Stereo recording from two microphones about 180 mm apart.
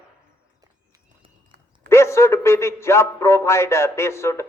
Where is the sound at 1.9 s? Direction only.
15° left (ahead or behind).